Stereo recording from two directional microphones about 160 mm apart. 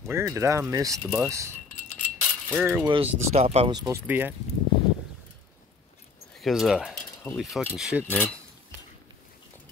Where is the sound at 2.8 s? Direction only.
35° right (ahead or behind).